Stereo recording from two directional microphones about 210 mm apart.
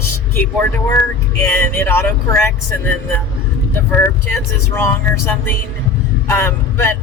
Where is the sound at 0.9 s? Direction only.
10° left (ahead or behind).